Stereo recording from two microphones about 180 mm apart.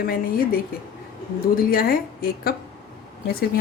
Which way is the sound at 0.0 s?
55° left (ahead or behind).